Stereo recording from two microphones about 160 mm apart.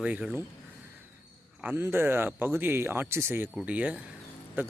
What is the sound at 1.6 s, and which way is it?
Speech, 15° right (ahead or behind).